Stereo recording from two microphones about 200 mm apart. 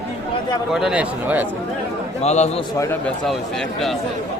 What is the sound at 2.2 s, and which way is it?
Speech, 35° left (ahead or behind).